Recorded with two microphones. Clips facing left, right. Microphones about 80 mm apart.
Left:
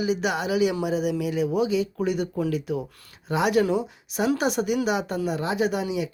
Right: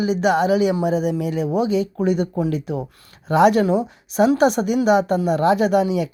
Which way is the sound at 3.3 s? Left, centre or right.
Right.